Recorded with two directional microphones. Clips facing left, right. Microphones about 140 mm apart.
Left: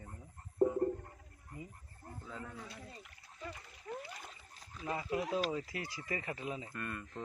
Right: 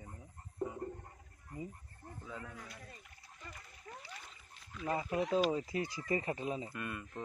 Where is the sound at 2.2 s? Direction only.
5° left (ahead or behind).